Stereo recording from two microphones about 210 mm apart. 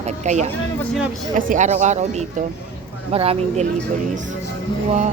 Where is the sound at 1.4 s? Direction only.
40° right (ahead or behind).